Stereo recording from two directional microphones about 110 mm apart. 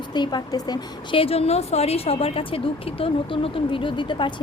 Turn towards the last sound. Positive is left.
turn(degrees=45)  # may be behind; listen again after turning